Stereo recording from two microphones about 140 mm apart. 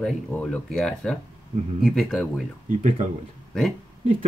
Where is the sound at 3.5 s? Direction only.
5° left (ahead or behind).